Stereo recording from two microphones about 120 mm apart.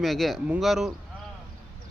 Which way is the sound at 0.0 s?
Centre (ahead or behind).